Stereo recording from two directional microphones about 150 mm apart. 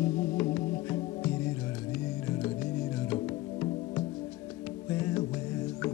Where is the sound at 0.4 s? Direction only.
10° left (ahead or behind).